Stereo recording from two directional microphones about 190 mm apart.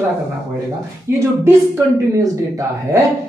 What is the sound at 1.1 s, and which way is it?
Speech, 15° right (ahead or behind).